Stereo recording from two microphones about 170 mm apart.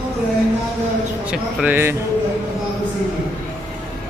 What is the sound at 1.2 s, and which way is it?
Speech, 5° right (ahead or behind).